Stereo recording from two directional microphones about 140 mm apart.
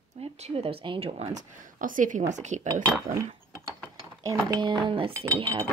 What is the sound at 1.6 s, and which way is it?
Speech, 70° right (ahead or behind).